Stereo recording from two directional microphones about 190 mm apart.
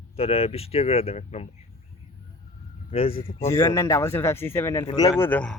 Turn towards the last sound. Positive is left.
turn(degrees=5)  # may be behind; listen again after turning